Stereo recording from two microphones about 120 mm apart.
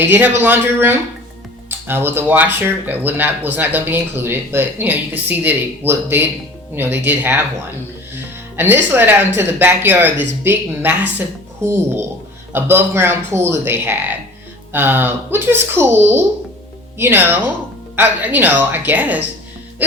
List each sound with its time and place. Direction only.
0.0 s speech: 20° right (ahead or behind)